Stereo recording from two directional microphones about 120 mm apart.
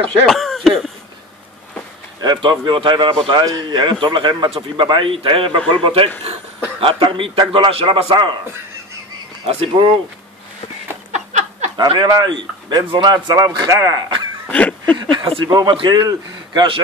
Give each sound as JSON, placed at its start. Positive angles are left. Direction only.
{"t": 0.3, "sound": "cough", "side_deg": 0}
{"t": 2.2, "sound": "a man's voice", "side_deg": -40}
{"t": 9.5, "sound": "a man's voice", "side_deg": -45}
{"t": 11.1, "sound": "a sound", "side_deg": -75}
{"t": 11.7, "sound": "a man's voice", "side_deg": -40}
{"t": 14.5, "sound": "a sound", "side_deg": 10}
{"t": 15.0, "sound": "a man's voice", "side_deg": -45}